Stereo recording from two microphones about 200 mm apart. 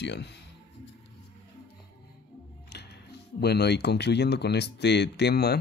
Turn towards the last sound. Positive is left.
turn(degrees=55)  # may be behind; listen again after turning